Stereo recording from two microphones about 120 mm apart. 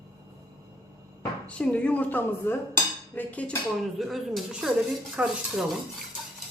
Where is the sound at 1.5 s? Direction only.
10° left (ahead or behind).